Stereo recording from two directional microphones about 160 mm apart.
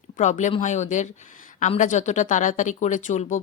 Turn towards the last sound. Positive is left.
turn(degrees=50)  # may be behind; listen again after turning